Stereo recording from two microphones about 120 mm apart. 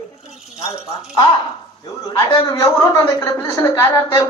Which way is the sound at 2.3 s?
45° left (ahead or behind).